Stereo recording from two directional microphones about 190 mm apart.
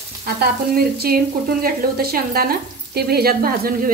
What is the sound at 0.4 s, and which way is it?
Frying, 55° right (ahead or behind).